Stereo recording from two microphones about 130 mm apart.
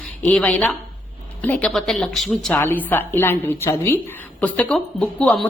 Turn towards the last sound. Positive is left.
turn(degrees=10)  # may be behind; listen again after turning